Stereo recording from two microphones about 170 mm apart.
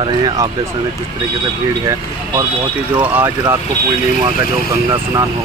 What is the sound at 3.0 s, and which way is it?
Speech, 10° right (ahead or behind).